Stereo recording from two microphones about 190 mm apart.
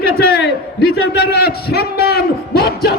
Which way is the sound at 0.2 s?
60° left (ahead or behind).